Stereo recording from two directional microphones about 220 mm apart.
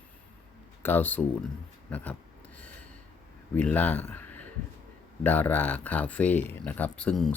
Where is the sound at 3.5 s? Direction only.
5° left (ahead or behind).